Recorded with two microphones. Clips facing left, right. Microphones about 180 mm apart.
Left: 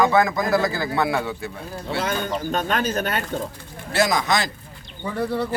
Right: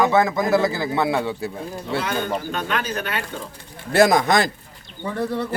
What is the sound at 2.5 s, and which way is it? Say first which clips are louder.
Speech: left 3 dB; 45° left (ahead or behind).